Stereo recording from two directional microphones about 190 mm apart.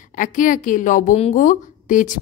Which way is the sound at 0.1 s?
45° left (ahead or behind).